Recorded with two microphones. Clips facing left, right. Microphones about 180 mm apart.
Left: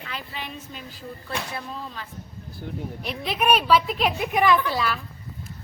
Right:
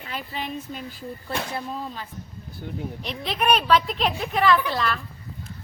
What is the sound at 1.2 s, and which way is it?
Speech, 25° right (ahead or behind).